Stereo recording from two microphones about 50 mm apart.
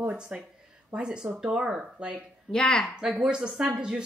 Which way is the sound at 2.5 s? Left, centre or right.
Centre.